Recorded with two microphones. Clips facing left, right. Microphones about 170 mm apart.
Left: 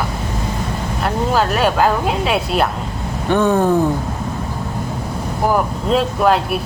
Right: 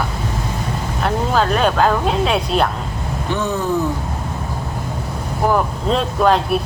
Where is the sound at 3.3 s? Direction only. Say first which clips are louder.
Left 7 dB; 55° left (ahead or behind).